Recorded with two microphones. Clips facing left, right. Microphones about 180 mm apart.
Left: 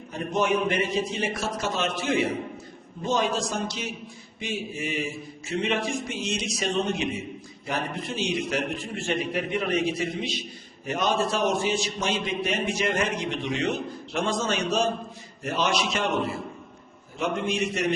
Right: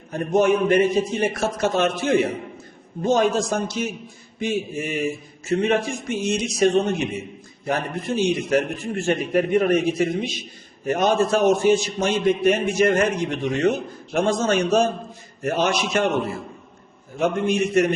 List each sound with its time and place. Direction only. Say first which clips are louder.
0.1 s a man's voice: right 6 dB; 50° right (ahead or behind)
17.2 s a man's voice: right 6 dB; 50° right (ahead or behind)